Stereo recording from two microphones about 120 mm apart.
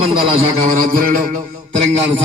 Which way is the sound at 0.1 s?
45° right (ahead or behind).